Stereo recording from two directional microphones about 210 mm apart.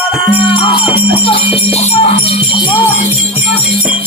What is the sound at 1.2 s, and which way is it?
Jingle bell, 25° left (ahead or behind).